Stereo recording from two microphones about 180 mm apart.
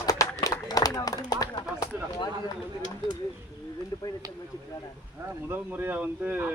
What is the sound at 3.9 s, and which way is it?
Speech, 25° left (ahead or behind).